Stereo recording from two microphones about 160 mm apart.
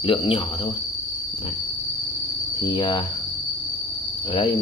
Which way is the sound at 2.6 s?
30° left (ahead or behind).